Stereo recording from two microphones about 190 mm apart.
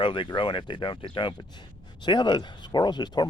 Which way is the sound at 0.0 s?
25° left (ahead or behind).